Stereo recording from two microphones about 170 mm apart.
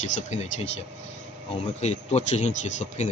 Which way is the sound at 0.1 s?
40° left (ahead or behind).